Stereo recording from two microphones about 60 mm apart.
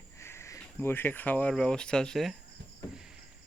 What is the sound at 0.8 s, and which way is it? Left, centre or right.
Speech, left.